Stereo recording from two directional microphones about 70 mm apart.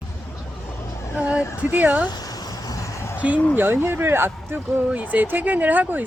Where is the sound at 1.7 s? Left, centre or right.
Right.